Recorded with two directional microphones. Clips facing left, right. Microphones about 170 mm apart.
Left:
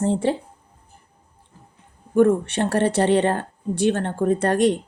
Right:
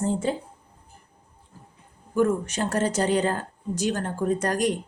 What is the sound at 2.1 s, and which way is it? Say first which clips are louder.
Speech: left 6 dB; 30° left (ahead or behind).